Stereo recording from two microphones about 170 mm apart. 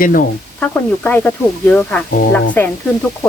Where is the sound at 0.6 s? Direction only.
10° left (ahead or behind).